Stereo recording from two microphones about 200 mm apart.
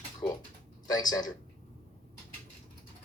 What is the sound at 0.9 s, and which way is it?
Speech, 20° left (ahead or behind).